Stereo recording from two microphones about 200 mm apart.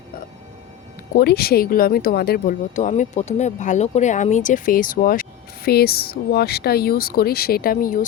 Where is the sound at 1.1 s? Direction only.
50° left (ahead or behind).